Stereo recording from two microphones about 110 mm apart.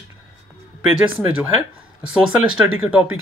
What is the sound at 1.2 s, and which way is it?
Speech, 15° right (ahead or behind).